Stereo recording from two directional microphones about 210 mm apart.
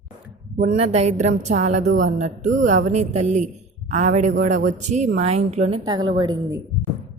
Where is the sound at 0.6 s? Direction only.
30° right (ahead or behind).